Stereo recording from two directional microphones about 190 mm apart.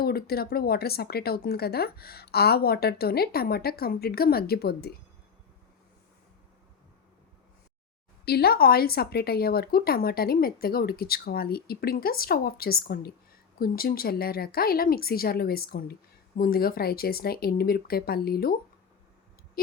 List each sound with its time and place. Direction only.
0.0 s speech: 55° left (ahead or behind)
8.2 s speech: 55° left (ahead or behind)